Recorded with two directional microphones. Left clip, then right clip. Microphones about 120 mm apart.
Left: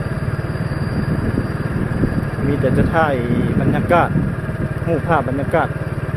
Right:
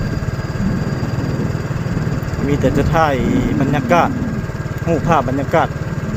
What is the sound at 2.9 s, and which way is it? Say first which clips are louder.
Speech: right 2 dB; 20° right (ahead or behind).